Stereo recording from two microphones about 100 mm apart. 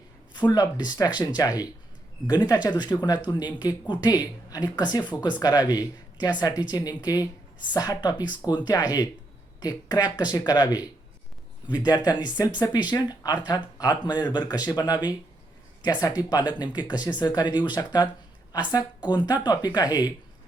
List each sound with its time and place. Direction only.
0.3 s speech: 45° left (ahead or behind)
11.9 s speech: 45° left (ahead or behind)